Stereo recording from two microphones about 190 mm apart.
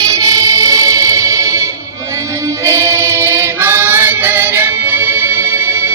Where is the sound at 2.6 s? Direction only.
15° right (ahead or behind).